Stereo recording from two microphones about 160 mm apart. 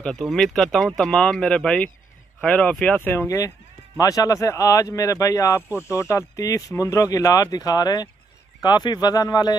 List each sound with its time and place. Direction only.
0.0 s speech: centre (ahead or behind); by 9.6 s 25° left (ahead or behind)